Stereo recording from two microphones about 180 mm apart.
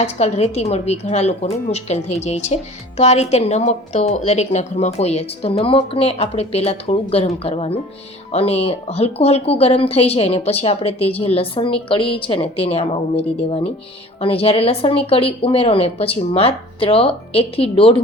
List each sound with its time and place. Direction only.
0.0 s speech: 35° left (ahead or behind)